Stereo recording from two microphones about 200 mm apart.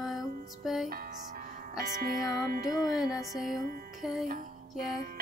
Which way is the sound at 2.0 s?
45° right (ahead or behind).